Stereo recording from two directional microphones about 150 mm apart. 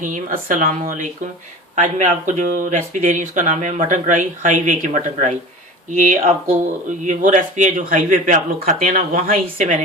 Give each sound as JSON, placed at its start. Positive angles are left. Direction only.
{"t": 0.0, "sound": "speech", "side_deg": -65}